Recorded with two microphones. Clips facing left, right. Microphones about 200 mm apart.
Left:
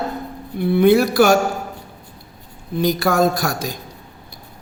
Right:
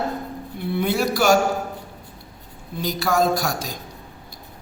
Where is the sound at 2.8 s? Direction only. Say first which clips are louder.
Left 4 dB; 55° left (ahead or behind).